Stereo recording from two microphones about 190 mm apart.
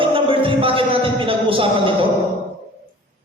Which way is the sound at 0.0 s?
30° right (ahead or behind).